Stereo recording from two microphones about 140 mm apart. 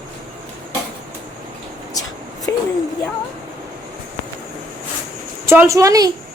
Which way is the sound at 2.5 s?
20° left (ahead or behind).